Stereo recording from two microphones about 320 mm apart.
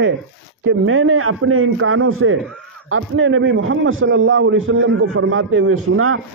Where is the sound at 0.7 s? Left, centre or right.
Right.